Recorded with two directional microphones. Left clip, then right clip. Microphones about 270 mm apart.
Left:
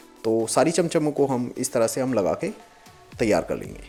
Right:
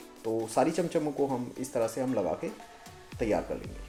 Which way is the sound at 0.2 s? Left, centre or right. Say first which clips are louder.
Left 7 dB; left.